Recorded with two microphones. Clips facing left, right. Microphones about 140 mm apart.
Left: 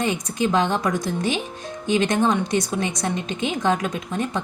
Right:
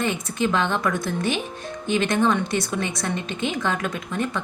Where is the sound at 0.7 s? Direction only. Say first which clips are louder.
Left 1 dB; 20° left (ahead or behind).